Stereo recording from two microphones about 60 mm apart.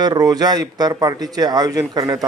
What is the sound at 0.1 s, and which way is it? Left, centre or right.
Speech, right.